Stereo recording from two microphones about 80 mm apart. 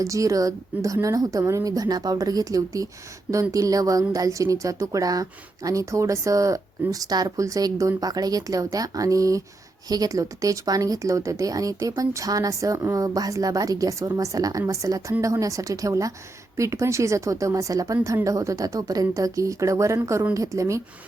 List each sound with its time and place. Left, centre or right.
0.0 s speech: right